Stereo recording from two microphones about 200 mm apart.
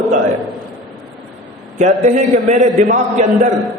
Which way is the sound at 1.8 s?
40° right (ahead or behind).